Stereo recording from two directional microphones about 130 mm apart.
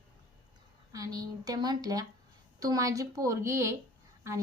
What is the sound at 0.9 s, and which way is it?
A woman's voice, 25° right (ahead or behind).